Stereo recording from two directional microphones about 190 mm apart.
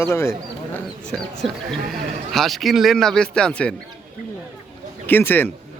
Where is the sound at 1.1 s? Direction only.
Centre (ahead or behind).